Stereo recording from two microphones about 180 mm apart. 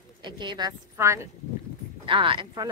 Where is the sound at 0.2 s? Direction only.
25° right (ahead or behind).